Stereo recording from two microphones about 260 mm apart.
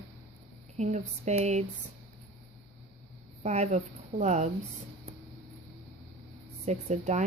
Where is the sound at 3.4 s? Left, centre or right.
Right.